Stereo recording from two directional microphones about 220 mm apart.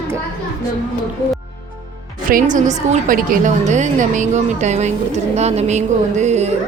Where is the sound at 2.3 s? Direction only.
35° right (ahead or behind).